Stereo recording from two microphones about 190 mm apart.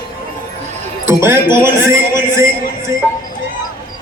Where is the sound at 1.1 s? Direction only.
10° right (ahead or behind).